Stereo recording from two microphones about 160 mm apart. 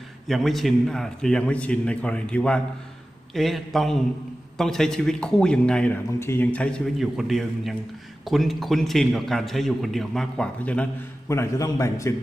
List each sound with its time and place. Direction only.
0.3 s a man's voice: centre (ahead or behind)
11.3 s a man's voice: 20° left (ahead or behind)